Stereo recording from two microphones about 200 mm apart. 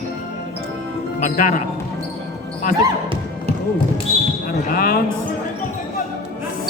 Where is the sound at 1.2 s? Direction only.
40° left (ahead or behind).